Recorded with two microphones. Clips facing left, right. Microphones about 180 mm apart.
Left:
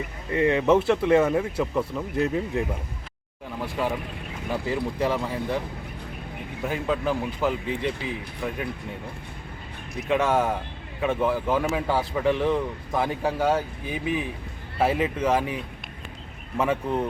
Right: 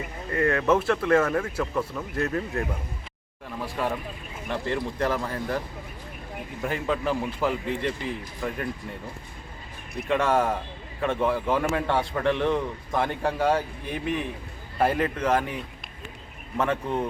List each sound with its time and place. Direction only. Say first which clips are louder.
0.3 s speech: left 3 dB; 20° left (ahead or behind)
3.6 s a man's voice: left 1 dB; centre (ahead or behind)
10.1 s a man's voice: left 1 dB; 5° left (ahead or behind)